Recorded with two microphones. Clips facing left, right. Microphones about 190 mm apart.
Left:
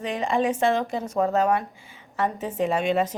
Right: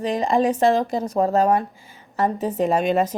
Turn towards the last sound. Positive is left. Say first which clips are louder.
# right 3 dB
turn(degrees=-40)  # may be behind; listen again after turning